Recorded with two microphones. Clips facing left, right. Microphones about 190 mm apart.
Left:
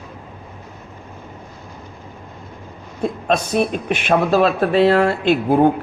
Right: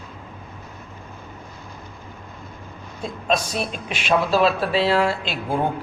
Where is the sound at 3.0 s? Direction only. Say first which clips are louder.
Left 4 dB; 60° left (ahead or behind).